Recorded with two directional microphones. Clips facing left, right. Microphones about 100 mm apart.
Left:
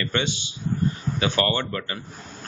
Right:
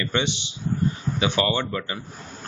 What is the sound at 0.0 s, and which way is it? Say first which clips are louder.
Speech: right 1 dB; 20° right (ahead or behind).